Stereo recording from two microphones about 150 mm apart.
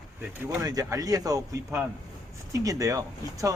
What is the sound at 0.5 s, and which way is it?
Speech, 25° right (ahead or behind).